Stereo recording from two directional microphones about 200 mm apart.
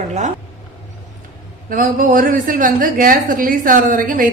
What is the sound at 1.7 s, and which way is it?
A woman's voice, 45° right (ahead or behind).